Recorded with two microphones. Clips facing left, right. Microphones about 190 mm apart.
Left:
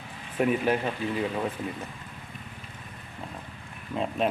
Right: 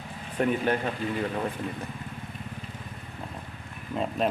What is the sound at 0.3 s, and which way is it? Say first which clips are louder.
Speech: left 1 dB; 5° left (ahead or behind).